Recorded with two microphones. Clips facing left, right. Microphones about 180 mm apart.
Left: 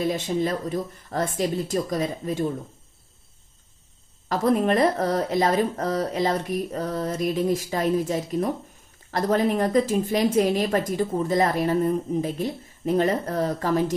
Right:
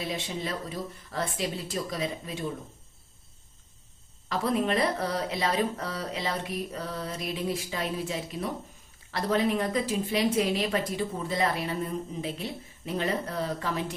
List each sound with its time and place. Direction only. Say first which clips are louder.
0.0 s a woman's voice: left 9 dB; 45° left (ahead or behind)
4.3 s a woman's voice: left 6 dB; 45° left (ahead or behind)